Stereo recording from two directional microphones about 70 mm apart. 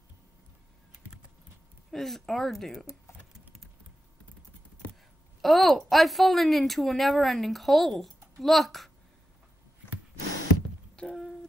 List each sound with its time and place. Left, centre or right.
1.9 s speech: centre
5.4 s speech: centre
11.0 s a sound: centre